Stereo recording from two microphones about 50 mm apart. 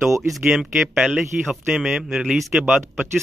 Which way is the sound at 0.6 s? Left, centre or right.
Centre.